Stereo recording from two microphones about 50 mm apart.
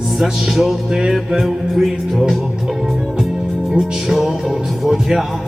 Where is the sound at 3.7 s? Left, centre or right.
Centre.